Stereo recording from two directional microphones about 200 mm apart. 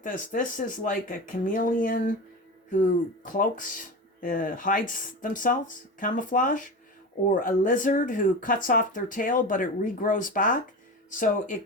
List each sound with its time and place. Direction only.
0.0 s speech: 40° left (ahead or behind)